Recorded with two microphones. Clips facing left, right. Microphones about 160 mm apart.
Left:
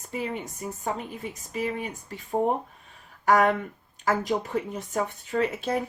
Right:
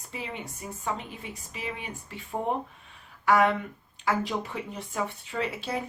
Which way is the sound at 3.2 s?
40° left (ahead or behind).